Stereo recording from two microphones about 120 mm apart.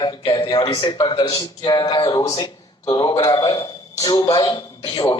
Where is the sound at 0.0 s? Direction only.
35° left (ahead or behind).